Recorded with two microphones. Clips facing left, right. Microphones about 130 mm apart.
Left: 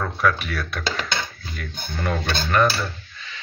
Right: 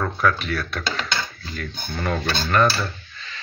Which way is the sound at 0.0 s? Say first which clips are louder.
Even; centre (ahead or behind).